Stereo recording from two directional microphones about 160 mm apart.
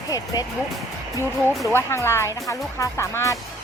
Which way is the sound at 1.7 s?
15° left (ahead or behind).